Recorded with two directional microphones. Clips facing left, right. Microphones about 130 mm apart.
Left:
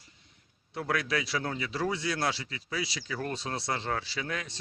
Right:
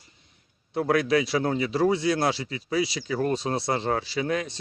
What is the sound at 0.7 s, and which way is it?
Speech, 25° right (ahead or behind).